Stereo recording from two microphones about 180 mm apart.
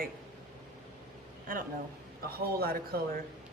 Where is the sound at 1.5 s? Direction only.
50° right (ahead or behind).